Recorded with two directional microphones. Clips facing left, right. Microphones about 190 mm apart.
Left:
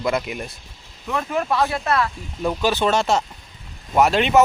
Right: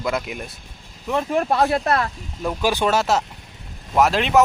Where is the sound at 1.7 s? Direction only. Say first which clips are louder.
Right 2 dB; 50° right (ahead or behind).